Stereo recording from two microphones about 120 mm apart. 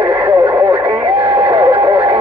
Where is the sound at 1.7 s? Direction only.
45° right (ahead or behind).